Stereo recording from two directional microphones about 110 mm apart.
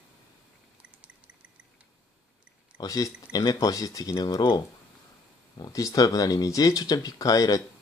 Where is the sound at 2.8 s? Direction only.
35° left (ahead or behind).